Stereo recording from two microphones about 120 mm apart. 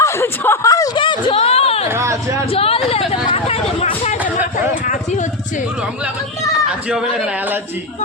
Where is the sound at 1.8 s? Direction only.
20° right (ahead or behind).